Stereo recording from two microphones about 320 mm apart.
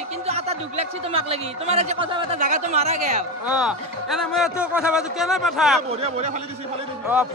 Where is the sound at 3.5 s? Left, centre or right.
Centre.